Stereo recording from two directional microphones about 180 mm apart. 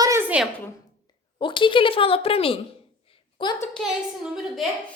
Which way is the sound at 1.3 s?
25° left (ahead or behind).